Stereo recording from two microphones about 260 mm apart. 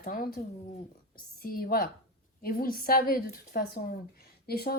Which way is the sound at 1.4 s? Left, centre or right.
Left.